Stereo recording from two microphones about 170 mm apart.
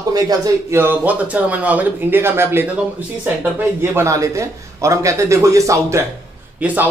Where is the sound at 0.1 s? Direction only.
20° right (ahead or behind).